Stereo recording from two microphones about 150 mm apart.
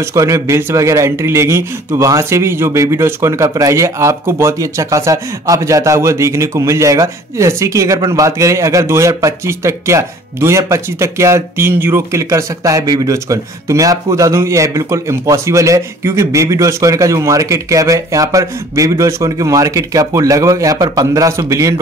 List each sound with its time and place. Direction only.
0.1 s speech: 20° right (ahead or behind)